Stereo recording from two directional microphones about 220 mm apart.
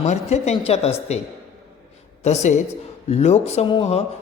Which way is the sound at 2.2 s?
30° left (ahead or behind).